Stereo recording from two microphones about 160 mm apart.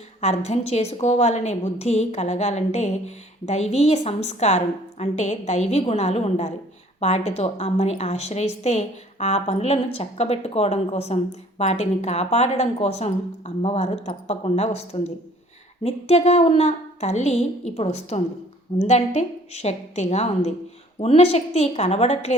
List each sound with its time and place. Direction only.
0.2 s a woman's voice: 45° left (ahead or behind)